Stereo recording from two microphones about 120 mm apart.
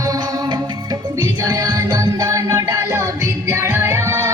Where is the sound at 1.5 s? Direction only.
35° right (ahead or behind).